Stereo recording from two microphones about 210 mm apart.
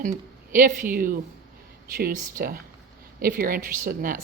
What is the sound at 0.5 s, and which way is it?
Speech, 40° right (ahead or behind).